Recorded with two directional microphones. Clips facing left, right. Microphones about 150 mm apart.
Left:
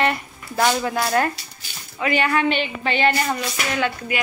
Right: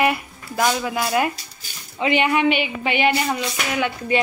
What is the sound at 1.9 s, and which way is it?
Speech, 20° right (ahead or behind).